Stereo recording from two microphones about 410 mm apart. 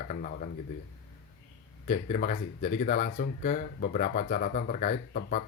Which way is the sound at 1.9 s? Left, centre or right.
Centre.